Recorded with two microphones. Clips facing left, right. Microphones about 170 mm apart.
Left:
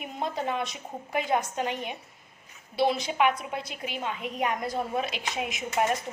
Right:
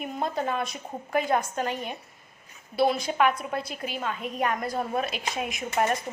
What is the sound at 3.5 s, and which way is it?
A woman's voice, 15° left (ahead or behind).